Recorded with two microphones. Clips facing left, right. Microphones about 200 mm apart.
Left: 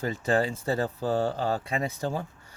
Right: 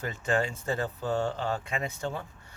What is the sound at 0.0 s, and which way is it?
Speech, 35° left (ahead or behind).